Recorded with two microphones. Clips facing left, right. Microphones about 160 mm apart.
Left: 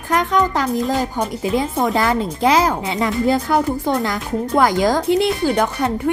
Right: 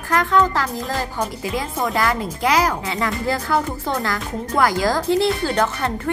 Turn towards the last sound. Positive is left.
turn(degrees=15)  # may be behind; listen again after turning